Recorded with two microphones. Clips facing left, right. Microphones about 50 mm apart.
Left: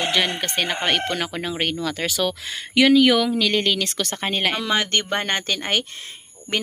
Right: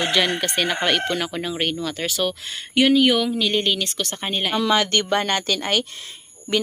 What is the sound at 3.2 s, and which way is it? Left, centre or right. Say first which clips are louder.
Speech: left 1 dB; left.